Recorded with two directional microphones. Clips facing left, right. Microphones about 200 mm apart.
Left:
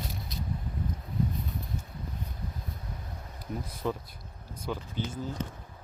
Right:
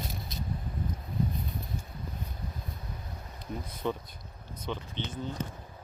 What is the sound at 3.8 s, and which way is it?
Speech, centre (ahead or behind).